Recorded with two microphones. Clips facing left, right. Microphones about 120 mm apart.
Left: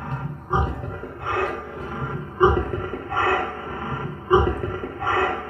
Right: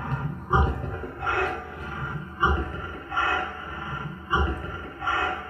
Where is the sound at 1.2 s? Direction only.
85° left.